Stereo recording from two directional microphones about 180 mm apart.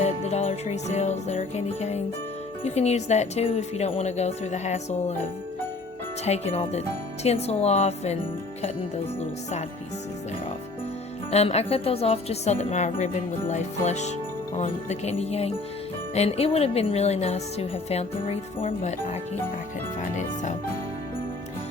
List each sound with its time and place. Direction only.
0.0 s speech: 35° left (ahead or behind)
6.2 s speech: 35° left (ahead or behind)
11.3 s speech: 35° left (ahead or behind)